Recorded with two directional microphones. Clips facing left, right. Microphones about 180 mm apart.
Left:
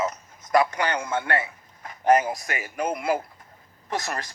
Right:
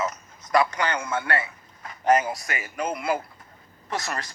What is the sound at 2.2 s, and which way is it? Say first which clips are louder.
Speech: left 1 dB; 45° left (ahead or behind).